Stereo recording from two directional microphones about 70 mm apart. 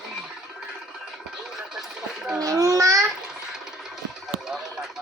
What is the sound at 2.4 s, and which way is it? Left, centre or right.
Babbling, right.